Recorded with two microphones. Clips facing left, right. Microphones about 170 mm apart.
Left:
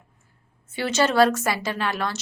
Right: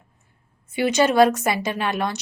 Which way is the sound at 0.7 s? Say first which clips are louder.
Right 3 dB; 15° right (ahead or behind).